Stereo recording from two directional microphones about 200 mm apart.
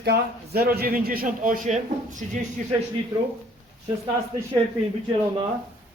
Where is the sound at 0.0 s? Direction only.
55° right (ahead or behind); by 2.4 s 40° right (ahead or behind).